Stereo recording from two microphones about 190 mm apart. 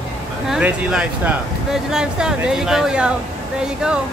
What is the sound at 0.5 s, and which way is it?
Speech, 5° right (ahead or behind).